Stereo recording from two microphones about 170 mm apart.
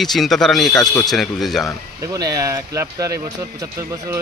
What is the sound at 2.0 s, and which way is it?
Speech, 20° right (ahead or behind).